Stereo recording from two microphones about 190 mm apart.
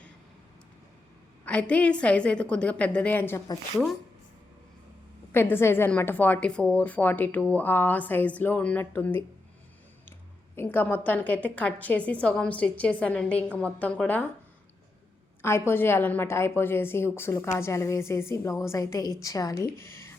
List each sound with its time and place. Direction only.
1.5 s a woman's voice: 5° left (ahead or behind)
5.3 s a woman's voice: 10° left (ahead or behind)
10.5 s a woman's voice: 10° left (ahead or behind)
15.4 s a woman's voice: 15° left (ahead or behind)